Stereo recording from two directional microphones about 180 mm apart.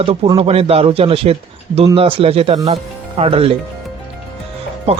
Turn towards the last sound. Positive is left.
turn(degrees=-35)  # may be behind; listen again after turning